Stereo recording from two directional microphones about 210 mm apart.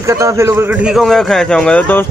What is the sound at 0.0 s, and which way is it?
A man's voice, 15° right (ahead or behind).